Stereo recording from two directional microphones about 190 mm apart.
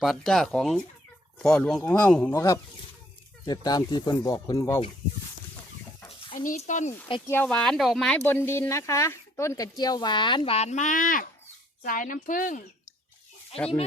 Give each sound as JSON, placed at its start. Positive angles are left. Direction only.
{"t": 0.0, "sound": "speech", "side_deg": 0}
{"t": 6.3, "sound": "speech", "side_deg": 45}
{"t": 7.3, "sound": "speech", "side_deg": 10}